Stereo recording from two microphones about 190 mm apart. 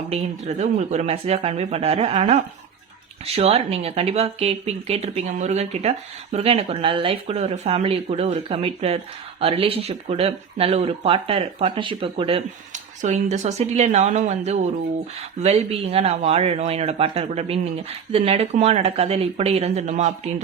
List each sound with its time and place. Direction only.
0.1 s speech: 35° right (ahead or behind)